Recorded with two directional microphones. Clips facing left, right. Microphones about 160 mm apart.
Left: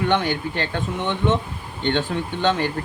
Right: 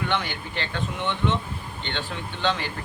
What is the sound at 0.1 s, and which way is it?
Speech, 45° left (ahead or behind).